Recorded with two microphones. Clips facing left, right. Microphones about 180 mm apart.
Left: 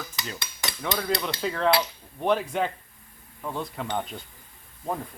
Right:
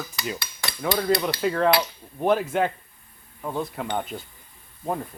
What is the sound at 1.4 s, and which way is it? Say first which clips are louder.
Speech: right 2 dB; 5° right (ahead or behind).